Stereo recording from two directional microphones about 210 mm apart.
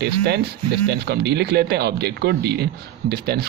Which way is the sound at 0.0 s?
50° right (ahead or behind).